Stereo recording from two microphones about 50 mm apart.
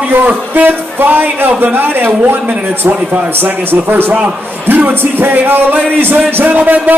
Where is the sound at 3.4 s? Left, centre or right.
Right.